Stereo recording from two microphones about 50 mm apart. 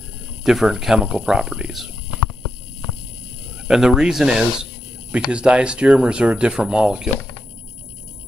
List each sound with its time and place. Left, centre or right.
0.4 s speech: centre
3.6 s speech: centre